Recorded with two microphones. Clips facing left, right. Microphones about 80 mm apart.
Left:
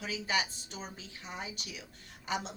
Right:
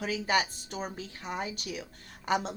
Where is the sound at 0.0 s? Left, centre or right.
Right.